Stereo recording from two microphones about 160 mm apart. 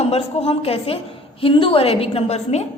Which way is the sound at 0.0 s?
40° left (ahead or behind).